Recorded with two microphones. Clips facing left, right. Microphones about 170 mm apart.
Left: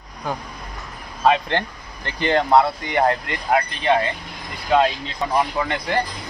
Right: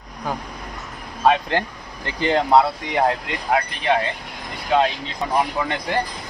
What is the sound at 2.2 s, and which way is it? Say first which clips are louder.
Speech: even; 5° right (ahead or behind).